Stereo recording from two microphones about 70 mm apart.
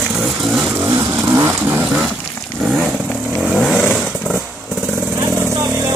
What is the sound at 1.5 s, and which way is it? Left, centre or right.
Vehicle, right.